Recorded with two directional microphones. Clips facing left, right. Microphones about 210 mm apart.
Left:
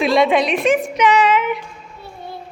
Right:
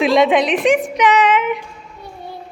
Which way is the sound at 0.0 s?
15° right (ahead or behind).